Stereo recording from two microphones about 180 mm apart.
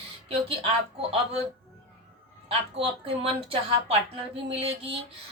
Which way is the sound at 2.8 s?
30° right (ahead or behind).